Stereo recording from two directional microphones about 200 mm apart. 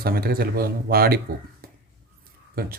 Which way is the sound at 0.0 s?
50° right (ahead or behind).